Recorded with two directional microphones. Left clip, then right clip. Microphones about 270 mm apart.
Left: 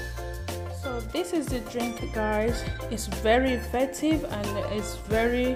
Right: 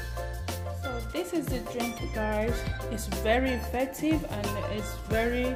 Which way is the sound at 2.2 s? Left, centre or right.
Left.